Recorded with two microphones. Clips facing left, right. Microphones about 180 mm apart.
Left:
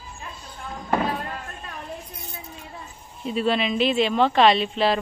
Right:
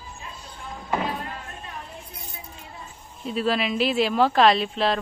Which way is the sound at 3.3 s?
Centre (ahead or behind).